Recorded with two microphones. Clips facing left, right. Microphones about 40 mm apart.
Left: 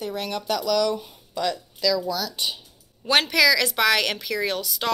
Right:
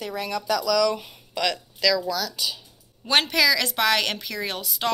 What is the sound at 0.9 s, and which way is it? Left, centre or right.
Speech, right.